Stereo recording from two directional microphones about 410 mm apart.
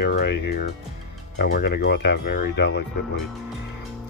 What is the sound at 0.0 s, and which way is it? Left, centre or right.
Speech, left.